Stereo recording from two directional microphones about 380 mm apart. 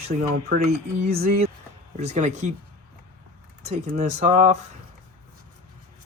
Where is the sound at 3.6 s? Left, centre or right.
Centre.